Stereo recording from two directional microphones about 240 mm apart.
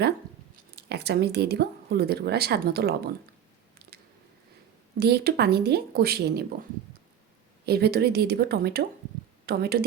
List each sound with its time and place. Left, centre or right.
0.8 s speech: right
3.8 s a sound: right
4.9 s speech: right
7.6 s speech: right